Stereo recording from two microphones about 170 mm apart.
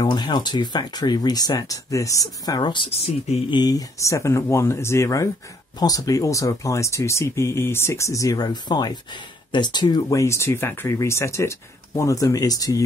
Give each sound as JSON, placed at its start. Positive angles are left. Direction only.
{"t": 0.0, "sound": "speech", "side_deg": 25}